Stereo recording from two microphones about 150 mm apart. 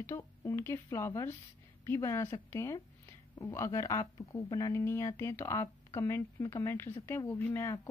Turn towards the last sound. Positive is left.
turn(degrees=15)  # may be behind; listen again after turning